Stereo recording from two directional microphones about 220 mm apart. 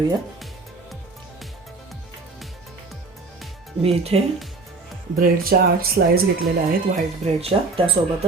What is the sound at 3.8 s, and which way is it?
Speech, 25° right (ahead or behind).